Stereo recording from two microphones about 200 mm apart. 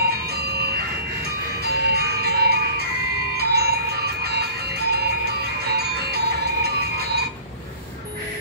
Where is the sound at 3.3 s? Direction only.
50° right (ahead or behind).